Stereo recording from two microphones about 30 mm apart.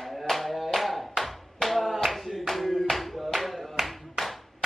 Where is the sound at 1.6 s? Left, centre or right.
Centre.